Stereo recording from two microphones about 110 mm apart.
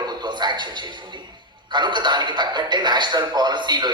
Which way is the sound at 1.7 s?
45° right (ahead or behind).